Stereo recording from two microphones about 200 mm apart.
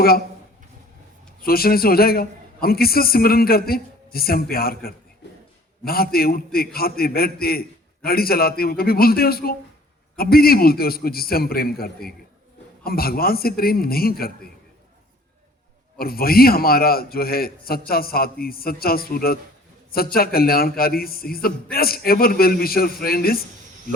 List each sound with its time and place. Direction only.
1.4 s a man's voice: 50° left (ahead or behind)
16.0 s a man's voice: 50° left (ahead or behind)